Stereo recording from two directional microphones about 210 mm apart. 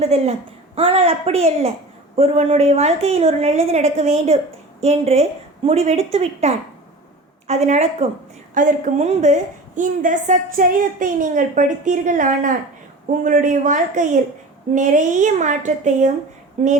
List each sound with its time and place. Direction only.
0.0 s a woman's voice: 30° right (ahead or behind)